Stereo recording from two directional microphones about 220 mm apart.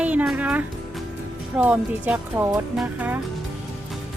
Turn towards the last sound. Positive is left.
turn(degrees=-5)  # may be behind; listen again after turning